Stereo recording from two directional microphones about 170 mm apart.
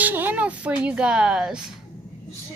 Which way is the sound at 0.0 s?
10° right (ahead or behind).